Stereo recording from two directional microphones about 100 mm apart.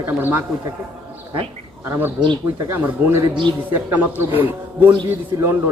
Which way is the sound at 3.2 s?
50° right (ahead or behind).